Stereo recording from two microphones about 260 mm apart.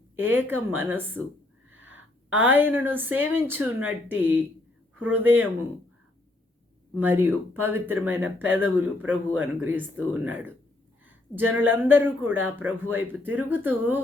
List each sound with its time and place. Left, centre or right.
0.2 s speech: centre
1.7 s a sound: right
2.3 s speech: centre
6.9 s speech: centre
11.0 s a sound: centre
11.8 s speech: centre